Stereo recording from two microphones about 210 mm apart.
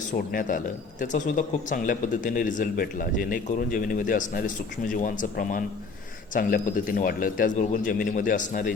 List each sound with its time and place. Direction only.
0.1 s speech: 40° left (ahead or behind)